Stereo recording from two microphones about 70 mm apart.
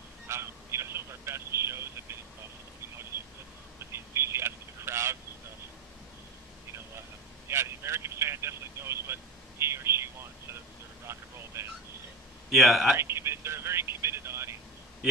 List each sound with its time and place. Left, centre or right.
0.3 s telephone: right
3.9 s telephone: right
7.4 s vehicle: right
12.4 s a man's voice: centre
12.9 s a sound: right